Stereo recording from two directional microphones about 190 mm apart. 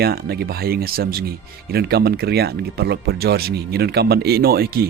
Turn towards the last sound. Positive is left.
turn(degrees=-55)  # may be behind; listen again after turning